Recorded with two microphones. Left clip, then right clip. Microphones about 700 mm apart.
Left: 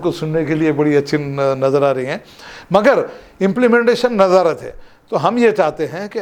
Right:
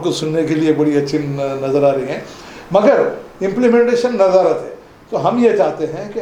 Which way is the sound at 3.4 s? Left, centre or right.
Left.